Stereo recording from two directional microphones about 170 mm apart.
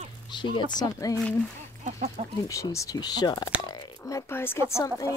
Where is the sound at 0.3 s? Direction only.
25° left (ahead or behind).